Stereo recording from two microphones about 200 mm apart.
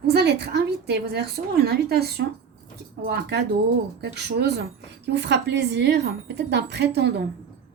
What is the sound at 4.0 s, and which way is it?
A woman's voice, 55° right (ahead or behind).